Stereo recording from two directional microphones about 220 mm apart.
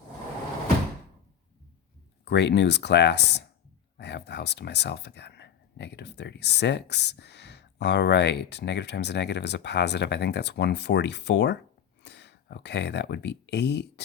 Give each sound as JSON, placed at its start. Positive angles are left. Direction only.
{"t": 2.2, "sound": "speech", "side_deg": 50}